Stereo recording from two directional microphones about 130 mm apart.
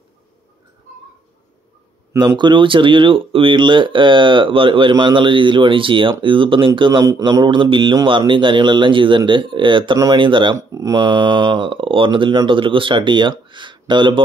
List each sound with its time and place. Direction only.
2.1 s speech: 35° right (ahead or behind)
10.5 s speech: 25° right (ahead or behind)